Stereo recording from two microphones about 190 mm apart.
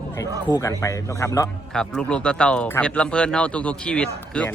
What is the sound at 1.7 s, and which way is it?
Speech, 5° left (ahead or behind).